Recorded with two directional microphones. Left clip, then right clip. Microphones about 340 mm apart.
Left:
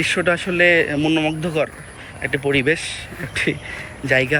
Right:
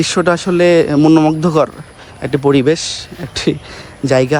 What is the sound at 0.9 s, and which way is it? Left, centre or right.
Speech, right.